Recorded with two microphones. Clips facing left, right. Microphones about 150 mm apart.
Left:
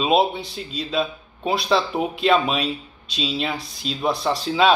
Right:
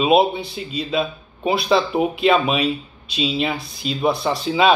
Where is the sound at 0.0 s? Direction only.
Centre (ahead or behind).